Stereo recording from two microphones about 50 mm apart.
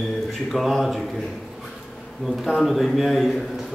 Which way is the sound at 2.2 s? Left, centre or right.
Centre.